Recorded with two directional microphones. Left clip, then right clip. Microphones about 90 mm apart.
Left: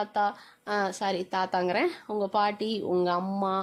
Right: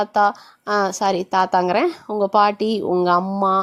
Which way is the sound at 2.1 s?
80° right.